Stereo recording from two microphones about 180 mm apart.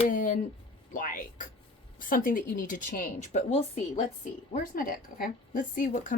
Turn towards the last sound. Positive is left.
turn(degrees=50)  # may be behind; listen again after turning